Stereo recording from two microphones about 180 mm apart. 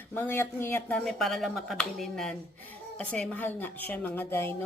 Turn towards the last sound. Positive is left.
turn(degrees=10)  # may be behind; listen again after turning